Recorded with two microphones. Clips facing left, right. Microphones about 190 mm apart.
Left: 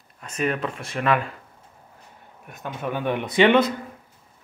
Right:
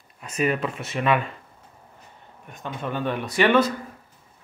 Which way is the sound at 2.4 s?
10° left (ahead or behind).